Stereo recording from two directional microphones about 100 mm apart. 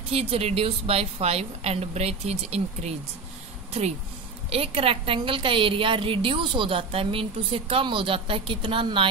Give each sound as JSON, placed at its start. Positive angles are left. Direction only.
{"t": 0.1, "sound": "a woman's voice", "side_deg": -75}
{"t": 4.5, "sound": "a woman's voice", "side_deg": -75}